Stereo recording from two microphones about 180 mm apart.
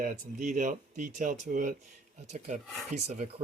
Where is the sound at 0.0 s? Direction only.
45° right (ahead or behind).